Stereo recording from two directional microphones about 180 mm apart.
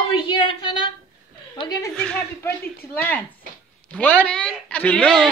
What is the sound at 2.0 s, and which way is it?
A woman's voice, 5° left (ahead or behind).